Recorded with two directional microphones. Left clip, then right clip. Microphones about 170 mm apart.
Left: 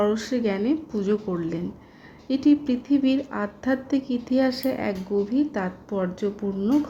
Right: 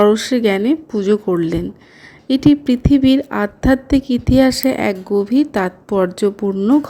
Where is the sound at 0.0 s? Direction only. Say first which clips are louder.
Right 11 dB; 35° right (ahead or behind).